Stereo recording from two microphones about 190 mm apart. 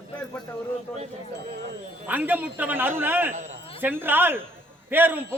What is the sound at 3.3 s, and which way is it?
Speech, 40° right (ahead or behind).